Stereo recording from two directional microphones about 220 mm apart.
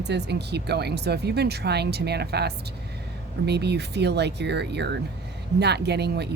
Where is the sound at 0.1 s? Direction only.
50° right (ahead or behind).